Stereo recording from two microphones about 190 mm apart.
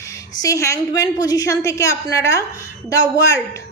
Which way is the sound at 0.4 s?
15° left (ahead or behind).